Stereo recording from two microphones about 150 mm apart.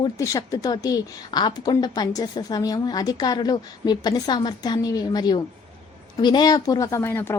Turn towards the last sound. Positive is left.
turn(degrees=15)  # may be behind; listen again after turning